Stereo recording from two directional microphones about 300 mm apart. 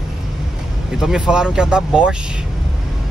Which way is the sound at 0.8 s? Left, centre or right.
Centre.